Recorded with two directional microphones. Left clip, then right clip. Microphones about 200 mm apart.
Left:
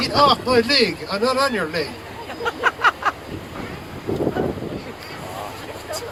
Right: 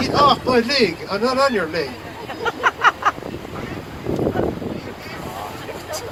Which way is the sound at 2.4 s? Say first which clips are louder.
Right 2 dB; 15° left (ahead or behind).